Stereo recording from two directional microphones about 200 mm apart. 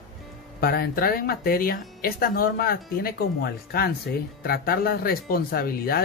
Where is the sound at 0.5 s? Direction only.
50° left (ahead or behind).